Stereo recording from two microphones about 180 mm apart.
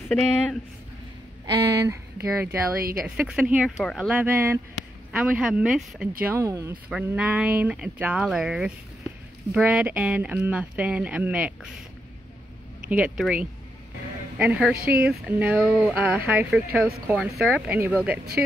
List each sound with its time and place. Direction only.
0.1 s speech: 5° left (ahead or behind)
1.4 s speech: 15° right (ahead or behind)
2.8 s speech: 55° right (ahead or behind)
3.2 s speech: 5° right (ahead or behind)
4.1 s speech: 10° right (ahead or behind)
6.2 s speech: 15° right (ahead or behind)
6.7 s speech: 5° right (ahead or behind)
13.2 s speech: 5° right (ahead or behind)